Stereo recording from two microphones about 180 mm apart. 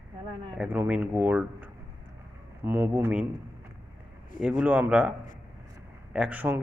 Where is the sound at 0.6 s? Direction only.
10° right (ahead or behind).